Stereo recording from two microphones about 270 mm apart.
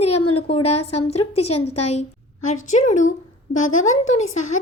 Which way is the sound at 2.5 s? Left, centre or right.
Left.